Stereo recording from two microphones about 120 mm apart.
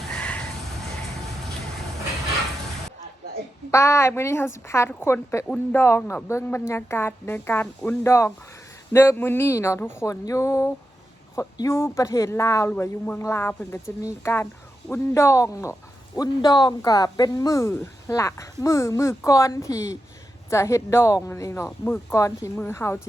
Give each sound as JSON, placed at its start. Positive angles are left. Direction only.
{"t": 0.2, "sound": "crow", "side_deg": 10}
{"t": 3.7, "sound": "speech", "side_deg": 25}
{"t": 21.7, "sound": "speech", "side_deg": 15}
{"t": 22.1, "sound": "speech", "side_deg": 25}